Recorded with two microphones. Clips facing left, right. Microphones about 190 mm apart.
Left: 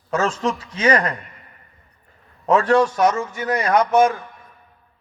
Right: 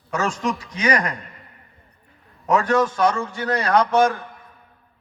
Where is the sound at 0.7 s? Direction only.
35° left (ahead or behind).